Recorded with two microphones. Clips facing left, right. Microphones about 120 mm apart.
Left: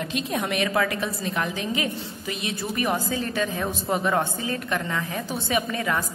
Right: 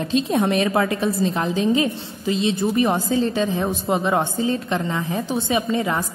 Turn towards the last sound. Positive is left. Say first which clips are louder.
# right 4 dB
turn(degrees=-25)  # may be behind; listen again after turning